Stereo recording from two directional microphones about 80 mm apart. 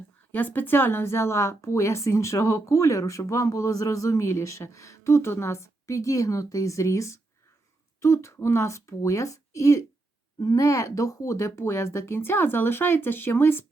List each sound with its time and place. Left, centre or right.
0.3 s a woman's voice: left